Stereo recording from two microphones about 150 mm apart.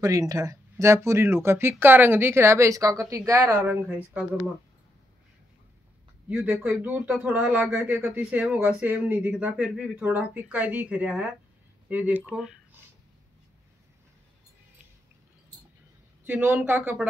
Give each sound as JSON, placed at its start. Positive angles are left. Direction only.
{"t": 0.0, "sound": "speech", "side_deg": -25}
{"t": 6.2, "sound": "speech", "side_deg": -10}
{"t": 16.3, "sound": "speech", "side_deg": -10}